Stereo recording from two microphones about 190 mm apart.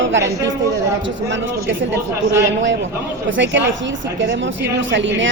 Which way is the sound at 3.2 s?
75° right (ahead or behind).